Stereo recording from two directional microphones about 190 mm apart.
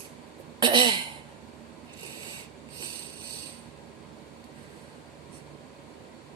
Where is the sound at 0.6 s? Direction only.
25° right (ahead or behind).